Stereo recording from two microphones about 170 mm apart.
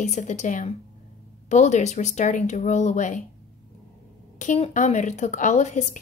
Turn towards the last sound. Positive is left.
turn(degrees=45)  # may be behind; listen again after turning